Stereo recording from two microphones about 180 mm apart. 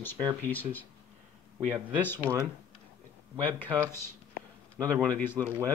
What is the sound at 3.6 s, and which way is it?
A man's voice, 15° right (ahead or behind).